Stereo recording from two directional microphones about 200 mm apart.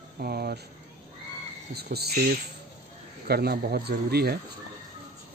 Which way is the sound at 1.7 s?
55° right (ahead or behind).